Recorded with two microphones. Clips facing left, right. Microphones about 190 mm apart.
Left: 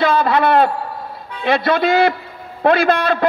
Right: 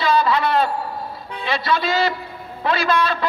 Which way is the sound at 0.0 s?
55° left (ahead or behind).